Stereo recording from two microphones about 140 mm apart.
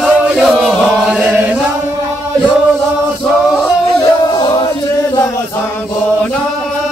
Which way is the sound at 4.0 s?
30° left (ahead or behind).